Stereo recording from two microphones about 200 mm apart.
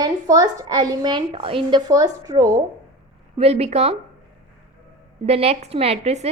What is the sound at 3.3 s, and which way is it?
Speech, 30° right (ahead or behind).